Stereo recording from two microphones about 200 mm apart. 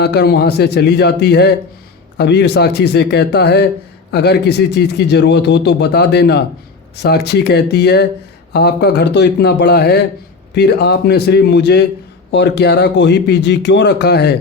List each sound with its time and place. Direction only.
0.0 s a man's voice: 55° left (ahead or behind)